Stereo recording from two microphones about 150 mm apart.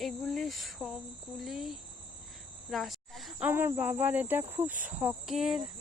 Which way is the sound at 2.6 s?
Centre (ahead or behind).